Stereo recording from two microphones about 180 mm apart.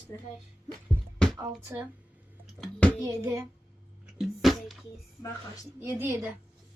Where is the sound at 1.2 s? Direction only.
5° left (ahead or behind).